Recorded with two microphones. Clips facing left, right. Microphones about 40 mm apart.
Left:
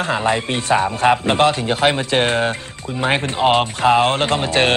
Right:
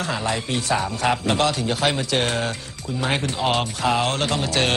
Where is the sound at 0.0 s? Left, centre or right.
Left.